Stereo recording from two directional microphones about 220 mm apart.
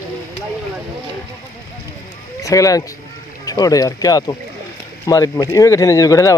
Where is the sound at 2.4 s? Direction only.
15° left (ahead or behind).